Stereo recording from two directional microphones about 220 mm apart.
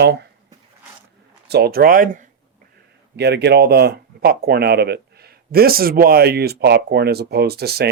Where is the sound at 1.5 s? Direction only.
45° right (ahead or behind).